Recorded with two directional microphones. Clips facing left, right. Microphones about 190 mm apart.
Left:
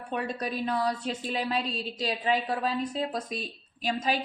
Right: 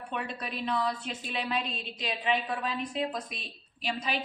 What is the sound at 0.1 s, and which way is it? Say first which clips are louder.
A woman's voice: left 5 dB; 40° left (ahead or behind).